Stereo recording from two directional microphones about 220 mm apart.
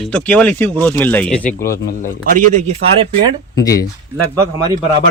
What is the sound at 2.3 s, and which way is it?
Speech, 35° right (ahead or behind).